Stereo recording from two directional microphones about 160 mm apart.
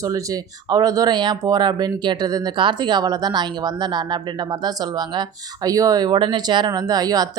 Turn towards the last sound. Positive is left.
turn(degrees=-25)  # may be behind; listen again after turning